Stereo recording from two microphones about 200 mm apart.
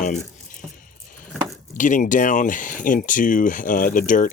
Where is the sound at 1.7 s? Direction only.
40° left (ahead or behind).